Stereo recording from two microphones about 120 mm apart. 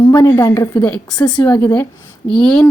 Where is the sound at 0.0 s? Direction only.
25° left (ahead or behind).